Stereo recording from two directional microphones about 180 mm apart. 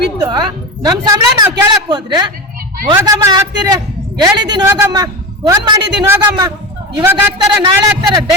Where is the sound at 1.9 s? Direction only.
25° right (ahead or behind).